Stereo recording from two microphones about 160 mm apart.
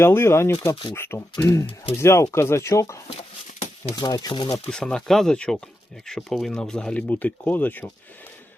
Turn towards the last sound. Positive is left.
turn(degrees=10)  # may be behind; listen again after turning